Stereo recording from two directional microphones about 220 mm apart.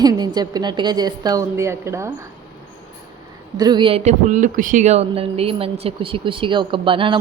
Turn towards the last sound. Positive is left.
turn(degrees=-25)  # may be behind; listen again after turning